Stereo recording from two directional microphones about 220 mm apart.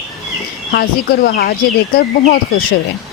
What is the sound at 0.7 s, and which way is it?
Speech, 45° left (ahead or behind).